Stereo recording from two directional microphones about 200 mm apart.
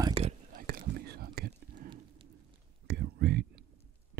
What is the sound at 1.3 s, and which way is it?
Whispering, 50° right (ahead or behind).